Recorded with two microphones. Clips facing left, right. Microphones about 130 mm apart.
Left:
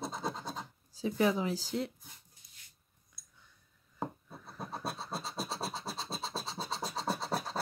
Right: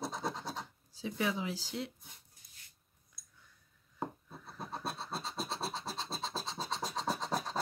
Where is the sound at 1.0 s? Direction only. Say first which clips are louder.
Left 6 dB; 40° left (ahead or behind).